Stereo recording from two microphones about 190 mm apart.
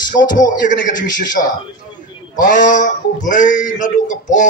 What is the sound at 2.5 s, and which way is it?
A man's voice, 40° left (ahead or behind).